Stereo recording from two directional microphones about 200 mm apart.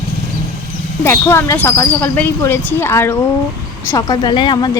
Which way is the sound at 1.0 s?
10° left (ahead or behind).